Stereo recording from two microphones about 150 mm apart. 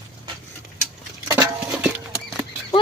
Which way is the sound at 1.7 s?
5° right (ahead or behind).